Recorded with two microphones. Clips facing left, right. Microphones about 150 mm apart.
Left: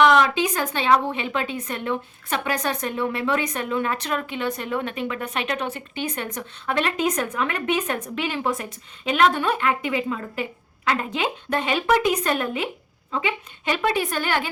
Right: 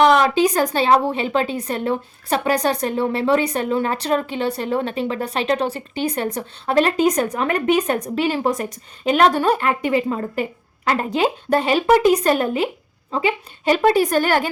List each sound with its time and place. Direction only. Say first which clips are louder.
0.0 s a woman's voice: right 3 dB; 35° right (ahead or behind)